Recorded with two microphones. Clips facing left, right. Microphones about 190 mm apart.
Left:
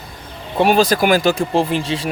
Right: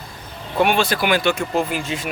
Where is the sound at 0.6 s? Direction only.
40° left (ahead or behind).